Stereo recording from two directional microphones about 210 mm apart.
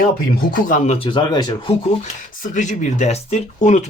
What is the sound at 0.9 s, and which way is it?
Speech, 25° left (ahead or behind).